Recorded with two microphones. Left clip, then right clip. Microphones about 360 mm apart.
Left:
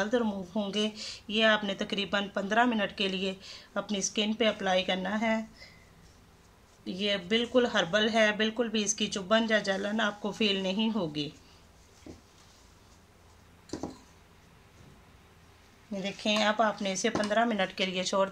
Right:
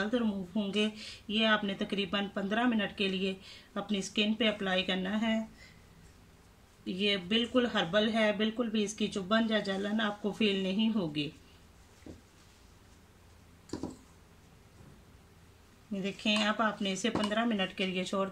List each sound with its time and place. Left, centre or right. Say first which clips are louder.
0.0 s speech: left 4 dB; centre
6.8 s speech: left 1 dB; centre
16.0 s speech: left 2 dB; left
16.3 s speech: left 4 dB; centre